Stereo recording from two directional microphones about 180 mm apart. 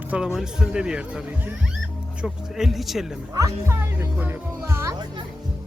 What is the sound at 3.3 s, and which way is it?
Speech, 15° right (ahead or behind).